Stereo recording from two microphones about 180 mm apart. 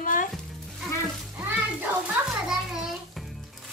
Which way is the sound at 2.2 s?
10° right (ahead or behind).